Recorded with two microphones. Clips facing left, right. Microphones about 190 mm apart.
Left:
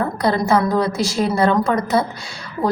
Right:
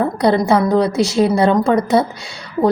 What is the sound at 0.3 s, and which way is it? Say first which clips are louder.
A woman's voice: right 3 dB; 25° right (ahead or behind).